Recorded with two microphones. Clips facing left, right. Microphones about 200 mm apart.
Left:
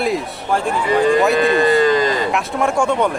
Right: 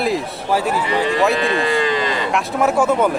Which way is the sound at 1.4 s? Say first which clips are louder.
Left 5 dB; 45° left (ahead or behind).